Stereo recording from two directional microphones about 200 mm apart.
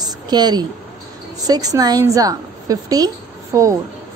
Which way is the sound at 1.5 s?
20° right (ahead or behind).